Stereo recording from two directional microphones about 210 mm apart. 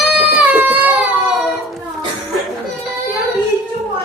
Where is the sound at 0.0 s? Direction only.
5° right (ahead or behind).